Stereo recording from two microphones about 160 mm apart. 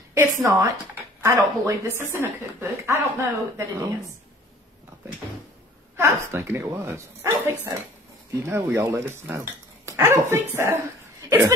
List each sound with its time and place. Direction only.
0.1 s a woman's voice: 20° right (ahead or behind)
5.9 s a woman's voice: 15° right (ahead or behind)